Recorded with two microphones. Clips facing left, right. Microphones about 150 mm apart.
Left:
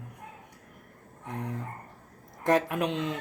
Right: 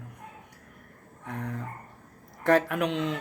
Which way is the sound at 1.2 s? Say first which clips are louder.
Even; 15° left (ahead or behind).